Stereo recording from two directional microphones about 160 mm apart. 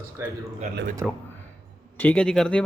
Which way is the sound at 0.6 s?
50° right (ahead or behind).